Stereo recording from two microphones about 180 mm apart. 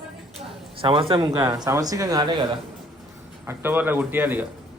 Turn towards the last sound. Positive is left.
turn(degrees=-10)  # may be behind; listen again after turning